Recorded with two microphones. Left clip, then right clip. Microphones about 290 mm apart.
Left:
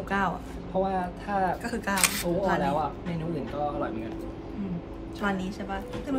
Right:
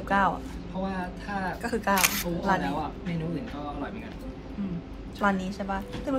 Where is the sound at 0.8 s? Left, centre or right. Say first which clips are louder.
Left 4 dB; left.